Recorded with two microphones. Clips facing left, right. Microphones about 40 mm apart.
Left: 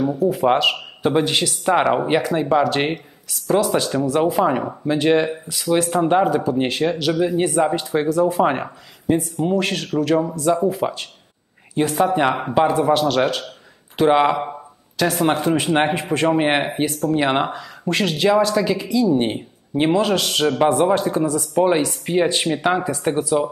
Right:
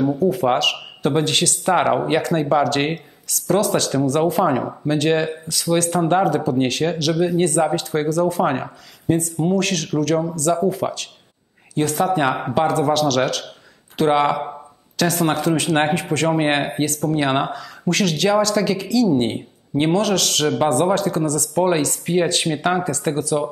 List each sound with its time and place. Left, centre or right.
0.3 s a man's voice: centre
16.3 s speech: centre
22.8 s speech: centre